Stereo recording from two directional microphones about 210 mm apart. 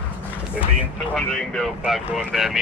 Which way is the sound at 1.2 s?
Centre (ahead or behind).